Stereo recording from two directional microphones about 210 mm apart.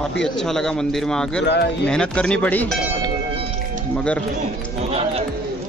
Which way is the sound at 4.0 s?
5° left (ahead or behind).